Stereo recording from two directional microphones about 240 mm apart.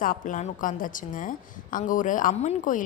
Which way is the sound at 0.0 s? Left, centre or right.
Left.